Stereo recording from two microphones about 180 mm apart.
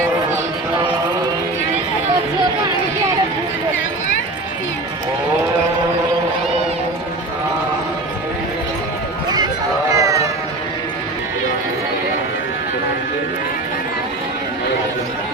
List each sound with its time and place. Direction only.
9.9 s music: 20° right (ahead or behind)